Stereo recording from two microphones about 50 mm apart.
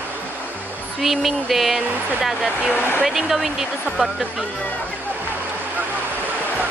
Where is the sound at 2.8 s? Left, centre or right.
Left.